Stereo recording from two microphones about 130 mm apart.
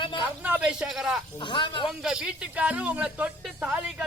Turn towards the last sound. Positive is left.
turn(degrees=-10)  # may be behind; listen again after turning